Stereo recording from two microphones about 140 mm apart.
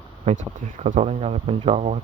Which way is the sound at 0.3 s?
55° right (ahead or behind).